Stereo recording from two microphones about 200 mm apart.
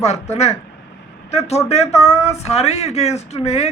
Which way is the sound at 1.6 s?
30° left (ahead or behind).